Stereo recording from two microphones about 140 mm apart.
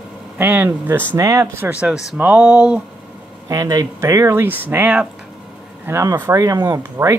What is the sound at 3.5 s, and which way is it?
Speech, 25° right (ahead or behind).